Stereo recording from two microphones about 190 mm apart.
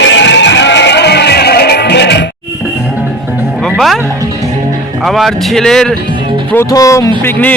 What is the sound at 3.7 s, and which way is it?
Music, centre (ahead or behind).